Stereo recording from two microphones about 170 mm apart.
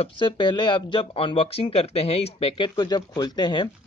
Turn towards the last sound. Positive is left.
turn(degrees=25)  # may be behind; listen again after turning